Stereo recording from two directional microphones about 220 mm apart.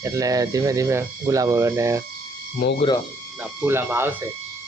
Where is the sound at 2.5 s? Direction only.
40° left (ahead or behind).